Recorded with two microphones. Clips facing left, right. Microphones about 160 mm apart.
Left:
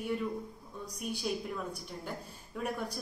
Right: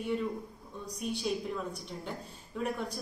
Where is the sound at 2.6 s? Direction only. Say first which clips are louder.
Right 2 dB; 5° left (ahead or behind).